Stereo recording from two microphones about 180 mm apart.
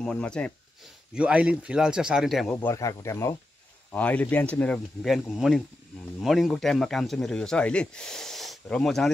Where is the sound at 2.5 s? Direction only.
15° left (ahead or behind).